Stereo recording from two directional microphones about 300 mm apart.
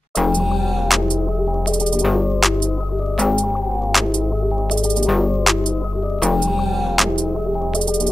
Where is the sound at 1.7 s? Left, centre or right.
Centre.